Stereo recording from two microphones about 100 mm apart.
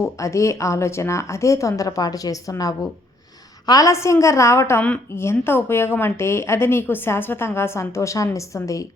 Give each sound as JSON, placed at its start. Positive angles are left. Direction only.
{"t": 0.0, "sound": "a woman's voice", "side_deg": 30}